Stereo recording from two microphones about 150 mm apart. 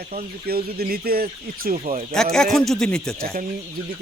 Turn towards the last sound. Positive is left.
turn(degrees=5)  # may be behind; listen again after turning